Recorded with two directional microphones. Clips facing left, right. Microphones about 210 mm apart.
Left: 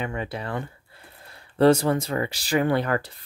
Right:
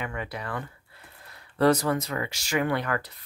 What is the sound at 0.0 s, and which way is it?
Speech, 30° left (ahead or behind).